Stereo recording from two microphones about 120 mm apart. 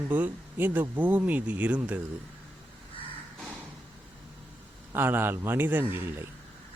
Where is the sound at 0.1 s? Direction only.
15° right (ahead or behind).